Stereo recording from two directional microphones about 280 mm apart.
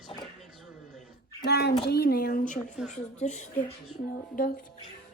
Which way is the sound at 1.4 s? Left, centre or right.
Left.